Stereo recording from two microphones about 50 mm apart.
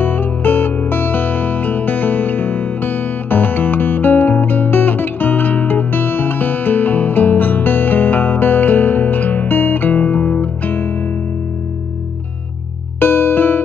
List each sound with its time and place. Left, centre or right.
0.0 s music: left
13.0 s music: left